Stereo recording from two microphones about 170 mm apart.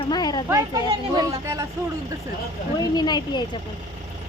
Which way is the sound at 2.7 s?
25° left (ahead or behind).